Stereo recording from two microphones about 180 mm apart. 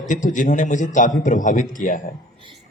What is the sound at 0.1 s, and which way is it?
A man's voice, 45° left (ahead or behind).